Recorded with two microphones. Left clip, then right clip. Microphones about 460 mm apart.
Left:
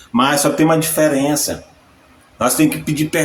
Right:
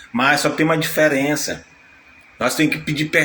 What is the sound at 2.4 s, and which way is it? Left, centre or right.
Speech, left.